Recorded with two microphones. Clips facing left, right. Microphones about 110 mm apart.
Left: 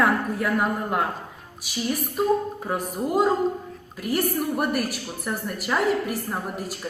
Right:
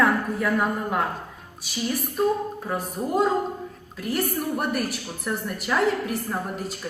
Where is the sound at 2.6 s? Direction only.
10° left (ahead or behind).